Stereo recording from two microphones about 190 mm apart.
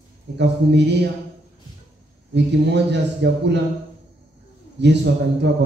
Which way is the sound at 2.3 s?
65° right (ahead or behind).